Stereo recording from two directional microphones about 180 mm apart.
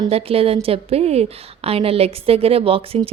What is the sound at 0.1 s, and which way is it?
A woman's voice, 30° right (ahead or behind).